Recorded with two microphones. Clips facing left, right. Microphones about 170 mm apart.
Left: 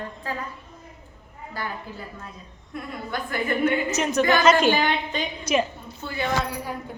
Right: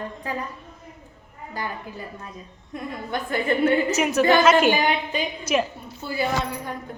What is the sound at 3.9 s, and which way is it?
A woman's voice, 10° right (ahead or behind).